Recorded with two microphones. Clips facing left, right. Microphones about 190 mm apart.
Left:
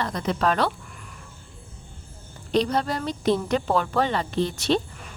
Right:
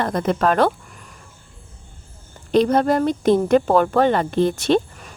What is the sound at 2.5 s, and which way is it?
A woman's voice, 50° right (ahead or behind).